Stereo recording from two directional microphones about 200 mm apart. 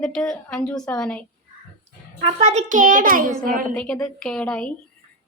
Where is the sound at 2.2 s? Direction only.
35° right (ahead or behind).